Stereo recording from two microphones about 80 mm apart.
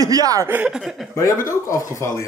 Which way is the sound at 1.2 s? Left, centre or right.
Left.